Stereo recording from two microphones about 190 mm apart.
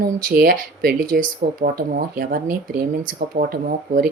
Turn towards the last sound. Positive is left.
turn(degrees=-50)  # may be behind; listen again after turning